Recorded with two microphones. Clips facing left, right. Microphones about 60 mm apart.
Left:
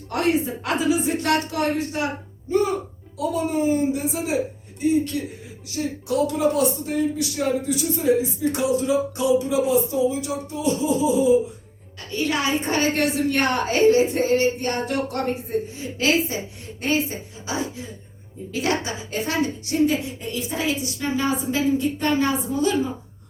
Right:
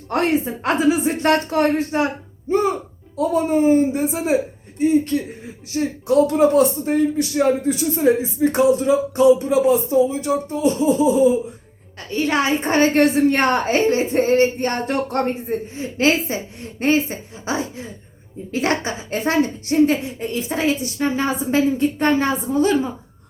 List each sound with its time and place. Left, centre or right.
0.1 s a woman's voice: right
2.5 s a sound: right
3.2 s a woman's voice: right
11.9 s a woman's voice: right